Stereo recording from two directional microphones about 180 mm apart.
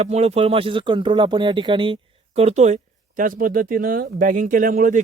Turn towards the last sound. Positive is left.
turn(degrees=-45)  # may be behind; listen again after turning